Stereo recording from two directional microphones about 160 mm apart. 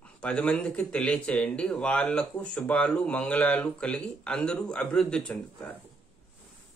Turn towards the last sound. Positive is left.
turn(degrees=5)  # may be behind; listen again after turning